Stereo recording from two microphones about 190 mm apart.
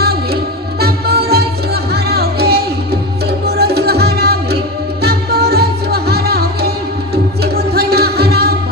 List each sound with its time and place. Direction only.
0.0 s music: 55° right (ahead or behind)